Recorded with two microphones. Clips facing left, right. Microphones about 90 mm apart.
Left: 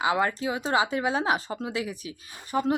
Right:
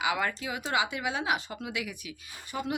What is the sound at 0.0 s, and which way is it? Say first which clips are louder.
Speech: left 5 dB; 30° left (ahead or behind).